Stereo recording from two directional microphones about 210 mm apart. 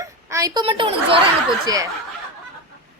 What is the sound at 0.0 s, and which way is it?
A woman's voice, 15° right (ahead or behind).